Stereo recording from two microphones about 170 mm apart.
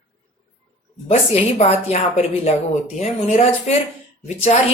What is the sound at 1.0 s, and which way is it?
Speech, 35° left (ahead or behind).